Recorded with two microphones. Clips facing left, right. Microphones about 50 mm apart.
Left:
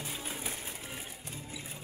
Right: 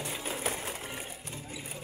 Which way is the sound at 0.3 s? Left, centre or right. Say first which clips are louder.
Right 6 dB; right.